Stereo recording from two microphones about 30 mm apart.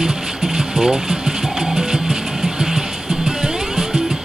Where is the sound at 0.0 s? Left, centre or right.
Right.